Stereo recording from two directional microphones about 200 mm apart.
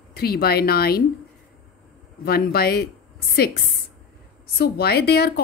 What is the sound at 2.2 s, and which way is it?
Speech, 50° left (ahead or behind).